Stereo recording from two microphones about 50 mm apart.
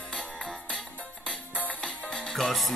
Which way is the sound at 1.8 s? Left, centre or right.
Centre.